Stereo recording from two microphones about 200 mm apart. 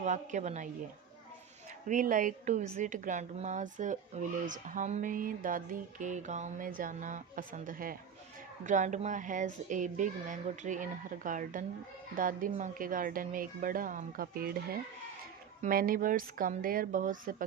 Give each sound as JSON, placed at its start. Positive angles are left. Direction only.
{"t": 0.0, "sound": "a woman's voice", "side_deg": -40}
{"t": 1.9, "sound": "a woman's voice", "side_deg": -40}